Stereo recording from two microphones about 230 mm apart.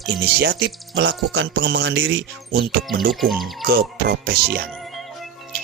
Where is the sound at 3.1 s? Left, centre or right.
Centre.